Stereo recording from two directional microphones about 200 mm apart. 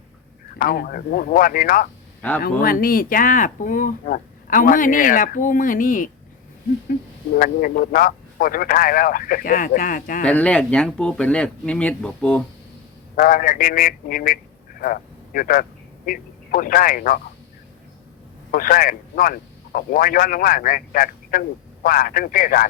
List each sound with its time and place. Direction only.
0.6 s a man's voice: 45° left (ahead or behind)
7.3 s a man's voice: 45° left (ahead or behind)
10.2 s speech: 5° left (ahead or behind)
13.1 s a man's voice: 45° left (ahead or behind)
18.5 s a man's voice: 45° left (ahead or behind)